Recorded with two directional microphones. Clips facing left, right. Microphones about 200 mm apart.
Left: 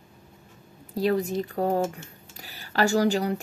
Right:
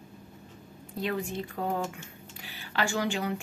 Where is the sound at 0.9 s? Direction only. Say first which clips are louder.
Left 8 dB; 40° left (ahead or behind).